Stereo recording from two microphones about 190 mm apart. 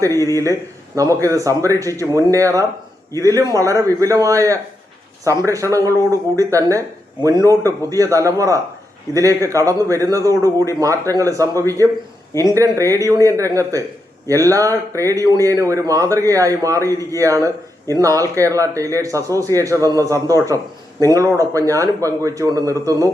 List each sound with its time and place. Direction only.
0.0 s speech: 20° right (ahead or behind)
12.3 s speech: 15° left (ahead or behind)
12.5 s speech: 15° right (ahead or behind)